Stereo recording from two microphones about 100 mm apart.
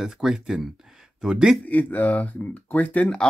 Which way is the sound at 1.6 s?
15° left (ahead or behind).